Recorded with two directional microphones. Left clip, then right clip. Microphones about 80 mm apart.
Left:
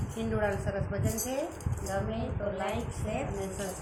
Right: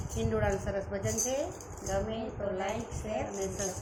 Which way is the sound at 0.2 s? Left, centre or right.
Centre.